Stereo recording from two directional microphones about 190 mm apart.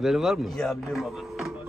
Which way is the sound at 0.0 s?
Centre (ahead or behind).